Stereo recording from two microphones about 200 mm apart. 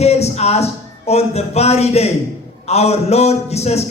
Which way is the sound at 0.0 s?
30° left (ahead or behind).